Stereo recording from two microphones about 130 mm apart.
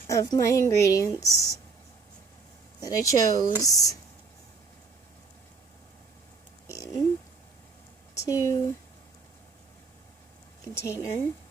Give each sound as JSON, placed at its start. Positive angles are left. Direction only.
{"t": 0.1, "sound": "a woman's voice", "side_deg": 25}
{"t": 2.8, "sound": "a woman's voice", "side_deg": 25}
{"t": 6.7, "sound": "a sound", "side_deg": 25}
{"t": 8.1, "sound": "speech", "side_deg": 25}
{"t": 10.8, "sound": "a woman's voice", "side_deg": 20}